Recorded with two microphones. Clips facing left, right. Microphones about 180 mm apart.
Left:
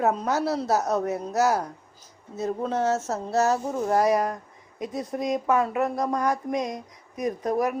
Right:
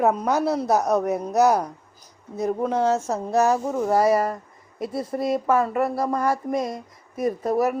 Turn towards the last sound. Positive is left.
turn(degrees=-5)  # may be behind; listen again after turning